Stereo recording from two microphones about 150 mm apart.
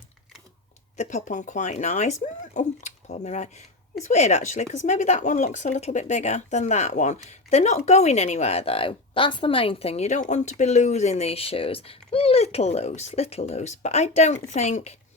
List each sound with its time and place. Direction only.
0.9 s speech: 55° left (ahead or behind)